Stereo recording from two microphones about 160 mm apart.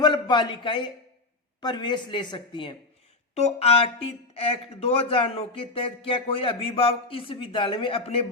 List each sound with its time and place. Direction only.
0.0 s a man's voice: 30° left (ahead or behind)
3.3 s speech: 40° left (ahead or behind)